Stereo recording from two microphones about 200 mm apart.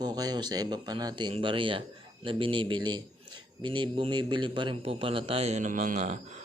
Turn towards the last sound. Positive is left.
turn(degrees=-35)  # may be behind; listen again after turning